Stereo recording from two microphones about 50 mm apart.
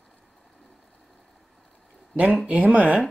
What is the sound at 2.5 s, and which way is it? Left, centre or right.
Speech, right.